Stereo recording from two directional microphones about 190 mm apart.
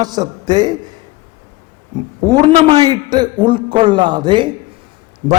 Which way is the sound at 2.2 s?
20° right (ahead or behind).